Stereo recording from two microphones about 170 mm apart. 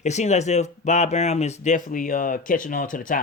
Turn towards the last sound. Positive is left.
turn(degrees=50)  # may be behind; listen again after turning